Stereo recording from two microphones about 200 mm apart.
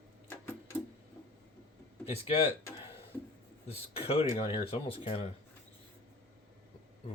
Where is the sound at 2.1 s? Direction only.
30° left (ahead or behind).